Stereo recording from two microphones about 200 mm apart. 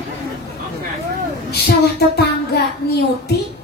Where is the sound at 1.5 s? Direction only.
55° left (ahead or behind).